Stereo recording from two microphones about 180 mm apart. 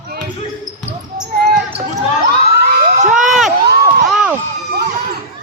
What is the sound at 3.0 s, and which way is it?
Crowd, 45° right (ahead or behind).